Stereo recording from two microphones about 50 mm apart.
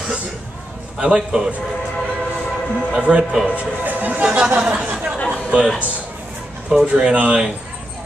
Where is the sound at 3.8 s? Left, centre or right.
Right.